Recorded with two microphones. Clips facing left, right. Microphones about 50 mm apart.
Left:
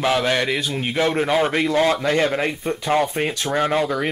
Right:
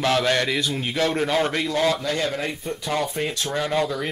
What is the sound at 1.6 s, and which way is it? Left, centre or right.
Speech, left.